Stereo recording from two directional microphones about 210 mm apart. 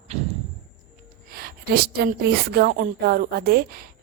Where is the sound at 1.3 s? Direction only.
45° right (ahead or behind).